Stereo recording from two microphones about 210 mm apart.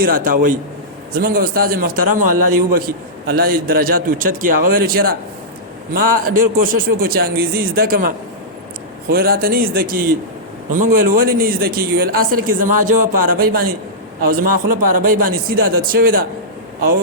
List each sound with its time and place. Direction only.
0.0 s a man's voice: 40° right (ahead or behind)